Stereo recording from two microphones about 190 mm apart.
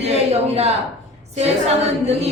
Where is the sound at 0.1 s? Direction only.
35° right (ahead or behind).